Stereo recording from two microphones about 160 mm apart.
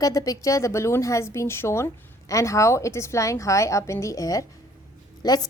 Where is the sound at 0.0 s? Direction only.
20° left (ahead or behind).